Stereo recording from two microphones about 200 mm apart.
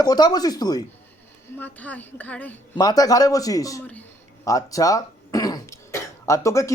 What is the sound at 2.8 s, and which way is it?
Speech, 20° left (ahead or behind).